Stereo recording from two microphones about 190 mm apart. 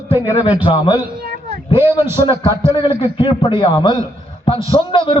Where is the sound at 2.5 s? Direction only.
15° right (ahead or behind).